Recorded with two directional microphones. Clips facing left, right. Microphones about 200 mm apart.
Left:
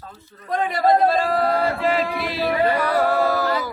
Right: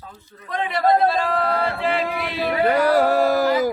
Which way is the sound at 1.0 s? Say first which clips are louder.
Left 2 dB; 45° left (ahead or behind).